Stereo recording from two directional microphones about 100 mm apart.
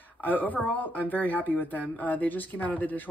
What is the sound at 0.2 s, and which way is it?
A woman's voice, 15° left (ahead or behind).